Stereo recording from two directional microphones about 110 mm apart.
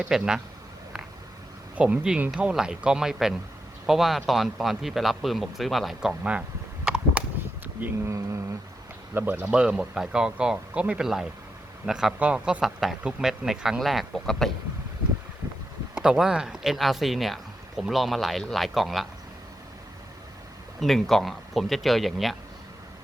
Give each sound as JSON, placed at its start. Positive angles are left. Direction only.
{"t": 0.1, "sound": "speech", "side_deg": -5}
{"t": 1.7, "sound": "speech", "side_deg": -10}
{"t": 6.8, "sound": "a sound", "side_deg": -10}
{"t": 7.8, "sound": "speech", "side_deg": -25}
{"t": 9.4, "sound": "speech", "side_deg": -10}
{"t": 16.0, "sound": "speech", "side_deg": -5}
{"t": 20.8, "sound": "speech", "side_deg": 0}